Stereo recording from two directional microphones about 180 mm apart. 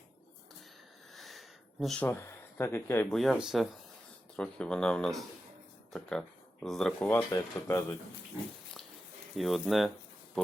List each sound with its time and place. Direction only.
1.1 s a sound: centre (ahead or behind)
3.2 s speech: centre (ahead or behind); by 7.9 s 15° left (ahead or behind)
9.3 s speech: centre (ahead or behind)